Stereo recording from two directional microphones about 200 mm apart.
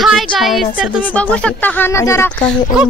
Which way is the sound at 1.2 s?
5° left (ahead or behind).